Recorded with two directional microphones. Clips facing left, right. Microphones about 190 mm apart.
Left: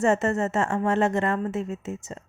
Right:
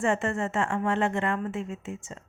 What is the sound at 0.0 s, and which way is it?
Speech, 40° left (ahead or behind).